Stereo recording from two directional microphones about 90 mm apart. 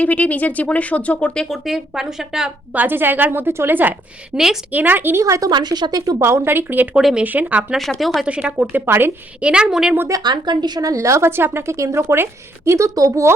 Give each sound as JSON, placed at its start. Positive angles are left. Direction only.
{"t": 0.0, "sound": "speech", "side_deg": 15}
{"t": 1.6, "sound": "speech", "side_deg": -5}
{"t": 2.7, "sound": "a woman's voice", "side_deg": -20}
{"t": 4.3, "sound": "a woman's voice", "side_deg": -10}
{"t": 5.2, "sound": "speech", "side_deg": -40}
{"t": 5.5, "sound": "speech", "side_deg": -55}
{"t": 6.1, "sound": "a woman's voice", "side_deg": -30}
{"t": 6.9, "sound": "speech", "side_deg": -10}
{"t": 7.7, "sound": "speech", "side_deg": 0}
{"t": 8.2, "sound": "speech", "side_deg": -10}
{"t": 8.5, "sound": "a woman's voice", "side_deg": -20}
{"t": 9.4, "sound": "speech", "side_deg": -10}
{"t": 10.1, "sound": "speech", "side_deg": -50}
{"t": 10.8, "sound": "speech", "side_deg": -35}